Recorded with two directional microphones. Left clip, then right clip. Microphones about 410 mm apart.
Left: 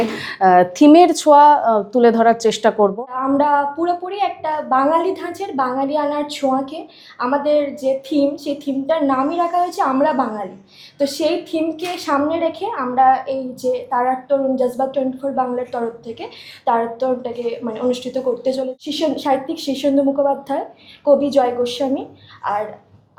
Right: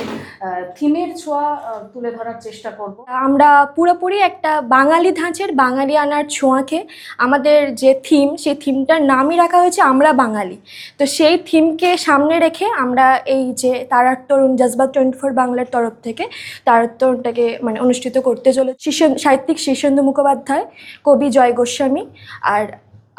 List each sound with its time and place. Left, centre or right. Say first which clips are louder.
0.4 s speech: left 9 dB; left
3.1 s a woman's voice: right 6 dB; right